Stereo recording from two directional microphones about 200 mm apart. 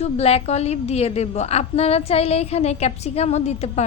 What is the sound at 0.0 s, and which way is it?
A woman's voice, 30° left (ahead or behind).